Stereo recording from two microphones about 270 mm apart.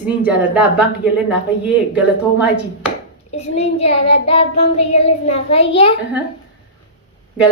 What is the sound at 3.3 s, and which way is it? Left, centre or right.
Child singing, left.